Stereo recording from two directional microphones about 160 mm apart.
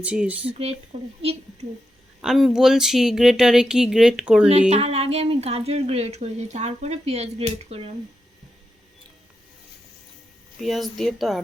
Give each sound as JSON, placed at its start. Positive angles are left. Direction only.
{"t": 0.0, "sound": "speech", "side_deg": -10}
{"t": 0.9, "sound": "a woman's voice", "side_deg": -40}
{"t": 2.2, "sound": "speech", "side_deg": -5}
{"t": 4.7, "sound": "a woman's voice", "side_deg": -40}
{"t": 10.6, "sound": "speech", "side_deg": 0}